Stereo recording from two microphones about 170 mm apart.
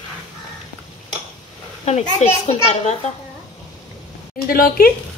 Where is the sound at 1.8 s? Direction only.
40° left (ahead or behind).